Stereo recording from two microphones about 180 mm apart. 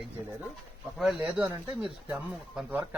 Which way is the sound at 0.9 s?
5° right (ahead or behind).